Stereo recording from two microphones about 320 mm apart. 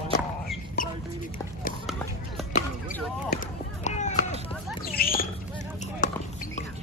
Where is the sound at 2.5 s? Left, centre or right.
Left.